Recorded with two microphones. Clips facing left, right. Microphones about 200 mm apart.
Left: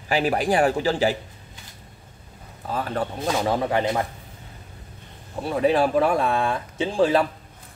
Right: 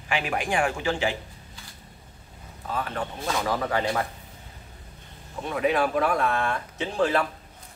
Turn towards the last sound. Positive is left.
turn(degrees=30)  # may be behind; listen again after turning